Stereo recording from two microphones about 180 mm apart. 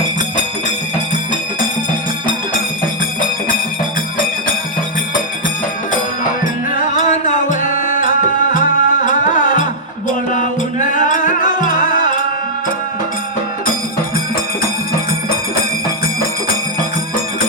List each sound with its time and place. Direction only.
6.4 s music: 45° left (ahead or behind)